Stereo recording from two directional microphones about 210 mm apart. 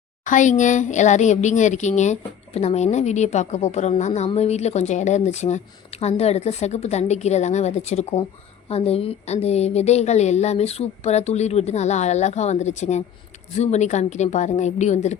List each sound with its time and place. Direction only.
0.3 s speech: 35° left (ahead or behind)